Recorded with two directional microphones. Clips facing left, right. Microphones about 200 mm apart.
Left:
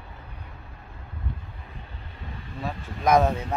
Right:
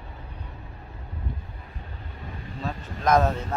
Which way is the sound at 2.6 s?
10° left (ahead or behind).